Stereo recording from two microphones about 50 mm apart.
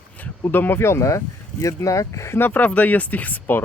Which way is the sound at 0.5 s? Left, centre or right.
Left.